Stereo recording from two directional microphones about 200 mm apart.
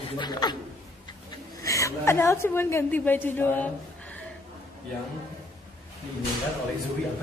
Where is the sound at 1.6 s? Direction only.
15° left (ahead or behind).